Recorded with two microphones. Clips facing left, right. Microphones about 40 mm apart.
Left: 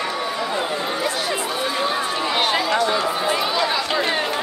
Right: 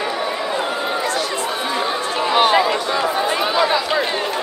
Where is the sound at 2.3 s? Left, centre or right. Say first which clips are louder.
Right 6 dB; centre.